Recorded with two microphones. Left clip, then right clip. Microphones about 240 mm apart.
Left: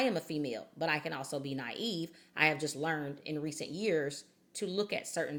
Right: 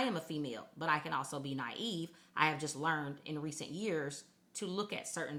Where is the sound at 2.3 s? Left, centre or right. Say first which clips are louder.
Left 3 dB; right.